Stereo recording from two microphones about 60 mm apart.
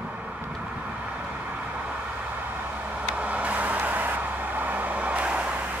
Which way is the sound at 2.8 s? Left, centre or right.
Right.